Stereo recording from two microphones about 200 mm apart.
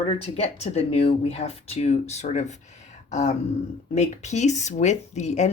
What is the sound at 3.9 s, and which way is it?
Speech, 35° left (ahead or behind).